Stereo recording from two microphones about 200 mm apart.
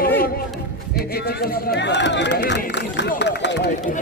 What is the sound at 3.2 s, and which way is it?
Run, 60° left (ahead or behind).